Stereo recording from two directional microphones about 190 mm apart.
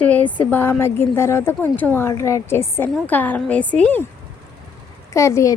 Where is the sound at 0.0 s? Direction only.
10° left (ahead or behind).